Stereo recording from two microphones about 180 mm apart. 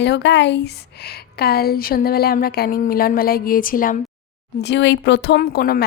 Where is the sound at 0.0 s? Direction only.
75° left (ahead or behind).